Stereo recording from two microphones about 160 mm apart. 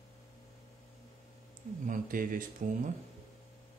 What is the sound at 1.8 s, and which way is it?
Speech, 60° right (ahead or behind).